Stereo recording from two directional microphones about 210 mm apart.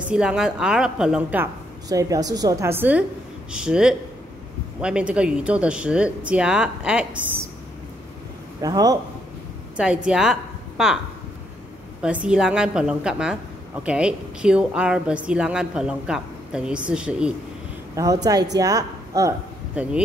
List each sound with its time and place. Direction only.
0.1 s a woman's voice: 5° right (ahead or behind)
8.5 s a woman's voice: 15° right (ahead or behind)
9.8 s a woman's voice: 5° right (ahead or behind)
12.0 s a woman's voice: 5° right (ahead or behind)
17.9 s a woman's voice: 15° right (ahead or behind)